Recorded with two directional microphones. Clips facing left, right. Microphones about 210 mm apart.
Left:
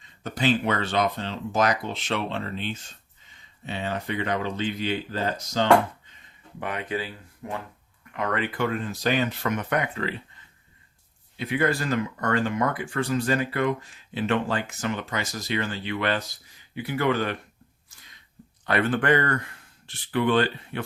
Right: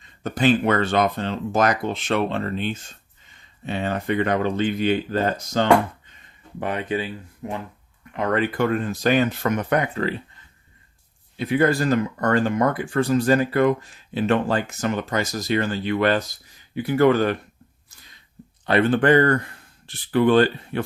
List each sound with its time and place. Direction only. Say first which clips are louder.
0.2 s speech: right 5 dB; 50° right (ahead or behind)
6.6 s speech: right 5 dB; 30° right (ahead or behind)
11.3 s speech: right 5 dB; 40° right (ahead or behind)
17.9 s a sound: right 3 dB; 35° right (ahead or behind)
18.6 s speech: right 6 dB; 30° right (ahead or behind)